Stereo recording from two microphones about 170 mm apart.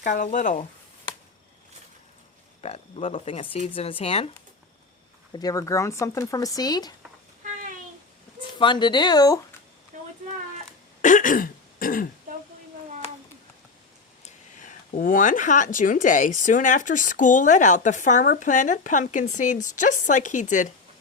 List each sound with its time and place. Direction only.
0.0 s speech: 50° left (ahead or behind)
2.6 s speech: 35° left (ahead or behind)
5.3 s speech: 20° left (ahead or behind)
8.5 s speech: 30° left (ahead or behind)
9.9 s a sound: 45° right (ahead or behind)
11.0 s throat clearing: 50° left (ahead or behind)
14.3 s speech: 50° left (ahead or behind)